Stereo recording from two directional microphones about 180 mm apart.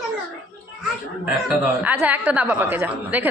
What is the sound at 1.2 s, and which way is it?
Speech, 10° right (ahead or behind).